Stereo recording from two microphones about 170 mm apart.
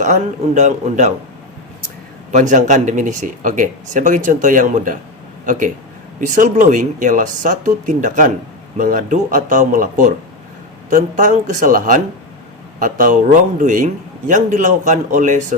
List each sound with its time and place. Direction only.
0.0 s speech: 45° right (ahead or behind)
2.3 s speech: 45° right (ahead or behind)